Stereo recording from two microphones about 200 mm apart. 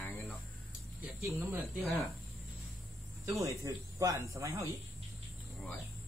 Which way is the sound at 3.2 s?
15° right (ahead or behind).